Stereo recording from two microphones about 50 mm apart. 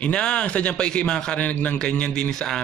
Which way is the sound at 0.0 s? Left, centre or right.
Left.